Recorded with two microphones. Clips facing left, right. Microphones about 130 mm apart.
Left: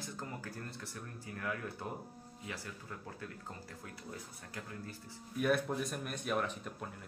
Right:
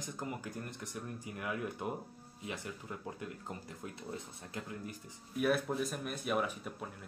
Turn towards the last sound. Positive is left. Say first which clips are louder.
# right 1 dB
turn(degrees=-5)  # may be behind; listen again after turning